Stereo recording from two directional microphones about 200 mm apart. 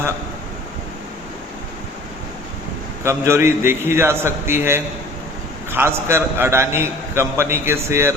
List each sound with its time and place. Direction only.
3.0 s a man's voice: 15° right (ahead or behind)